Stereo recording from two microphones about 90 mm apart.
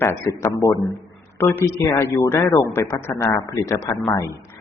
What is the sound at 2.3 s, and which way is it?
A man's voice, 25° left (ahead or behind).